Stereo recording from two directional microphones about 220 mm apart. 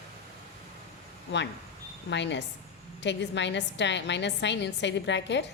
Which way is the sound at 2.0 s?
55° left (ahead or behind).